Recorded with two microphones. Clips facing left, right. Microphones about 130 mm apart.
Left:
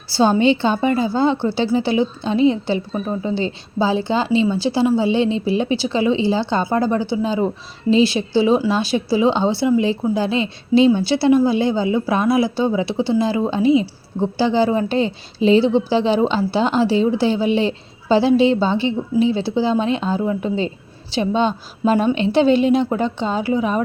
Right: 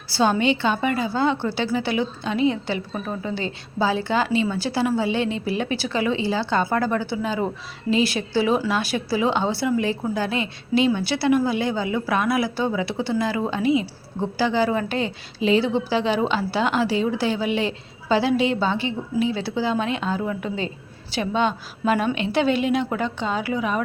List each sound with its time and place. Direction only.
0.1 s a woman's voice: 30° left (ahead or behind)